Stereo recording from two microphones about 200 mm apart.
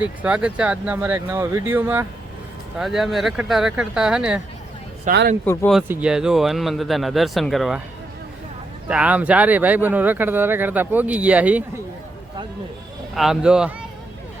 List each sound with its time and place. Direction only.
0.0 s speech: 5° right (ahead or behind)
5.1 s speech: 40° right (ahead or behind)
5.5 s speech: 5° left (ahead or behind)
8.9 s speech: 5° right (ahead or behind)
13.1 s speech: centre (ahead or behind)